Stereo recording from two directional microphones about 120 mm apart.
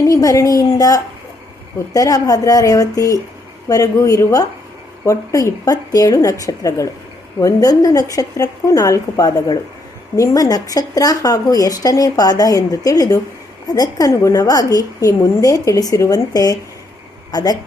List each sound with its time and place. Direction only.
0.0 s a woman's voice: 30° left (ahead or behind)